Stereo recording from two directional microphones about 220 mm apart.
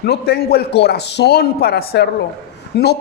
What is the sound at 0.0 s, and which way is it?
A man's voice, 45° left (ahead or behind).